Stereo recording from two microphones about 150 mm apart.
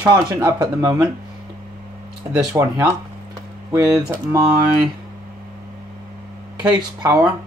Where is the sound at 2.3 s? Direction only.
20° right (ahead or behind).